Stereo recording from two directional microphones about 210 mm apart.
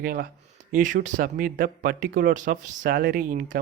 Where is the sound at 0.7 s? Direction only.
40° right (ahead or behind).